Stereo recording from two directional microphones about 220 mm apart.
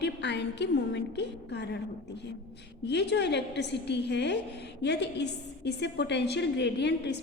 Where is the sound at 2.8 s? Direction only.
50° left (ahead or behind).